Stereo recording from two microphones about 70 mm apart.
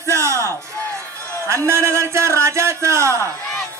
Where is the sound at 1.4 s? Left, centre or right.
Right.